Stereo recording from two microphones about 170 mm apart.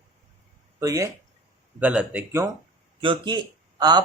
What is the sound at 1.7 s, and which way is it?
Speech, 5° right (ahead or behind).